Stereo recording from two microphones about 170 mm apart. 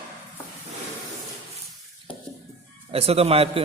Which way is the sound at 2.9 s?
35° right (ahead or behind).